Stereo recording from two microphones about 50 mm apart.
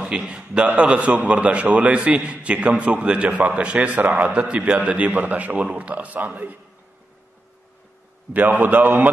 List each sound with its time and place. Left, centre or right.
0.0 s a man's voice: centre; by 6.6 s right
8.3 s a man's voice: right